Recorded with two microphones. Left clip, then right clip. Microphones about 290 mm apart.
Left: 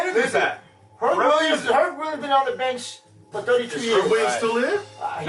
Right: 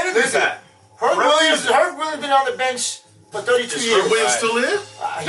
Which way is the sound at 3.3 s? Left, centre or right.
Left.